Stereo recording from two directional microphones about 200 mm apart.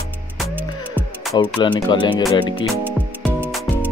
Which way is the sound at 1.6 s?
25° left (ahead or behind).